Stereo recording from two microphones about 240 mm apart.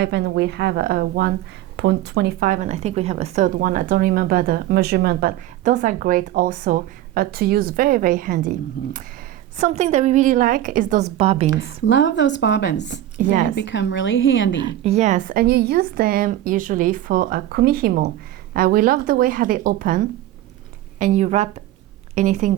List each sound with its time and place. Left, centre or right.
0.0 s a woman's voice: right
11.5 s a woman's voice: left
13.1 s speech: right
13.6 s a woman's voice: left
14.6 s speech: right
21.0 s a woman's voice: right